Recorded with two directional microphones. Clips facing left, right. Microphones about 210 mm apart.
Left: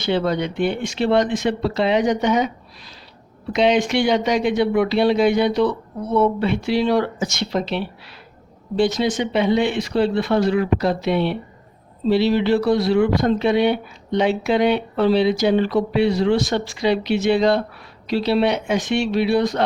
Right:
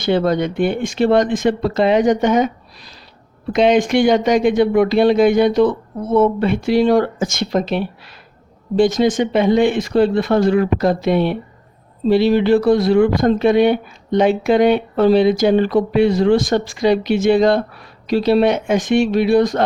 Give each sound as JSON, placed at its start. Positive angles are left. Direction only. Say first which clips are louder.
{"t": 0.0, "sound": "speech", "louder": "right 4 dB", "side_deg": -50}